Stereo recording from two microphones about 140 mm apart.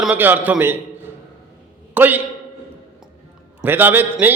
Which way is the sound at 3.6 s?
15° right (ahead or behind).